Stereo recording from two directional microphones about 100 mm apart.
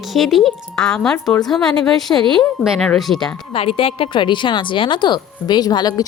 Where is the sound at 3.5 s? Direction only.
70° left (ahead or behind); by 6.0 s 40° left (ahead or behind).